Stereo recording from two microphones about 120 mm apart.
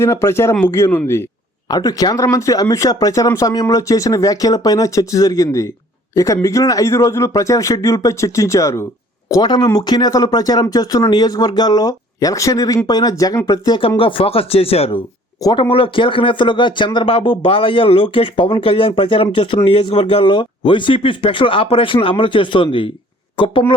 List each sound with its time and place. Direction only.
0.0 s speech: 20° left (ahead or behind)
1.6 s speech: 30° left (ahead or behind)
9.4 s speech: 40° left (ahead or behind)
13.7 s speech: 50° left (ahead or behind)